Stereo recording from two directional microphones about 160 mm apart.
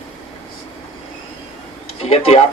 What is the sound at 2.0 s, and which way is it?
Speech, 40° left (ahead or behind).